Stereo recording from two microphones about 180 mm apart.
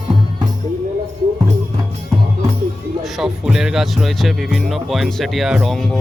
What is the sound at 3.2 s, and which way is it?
Speech, 5° right (ahead or behind).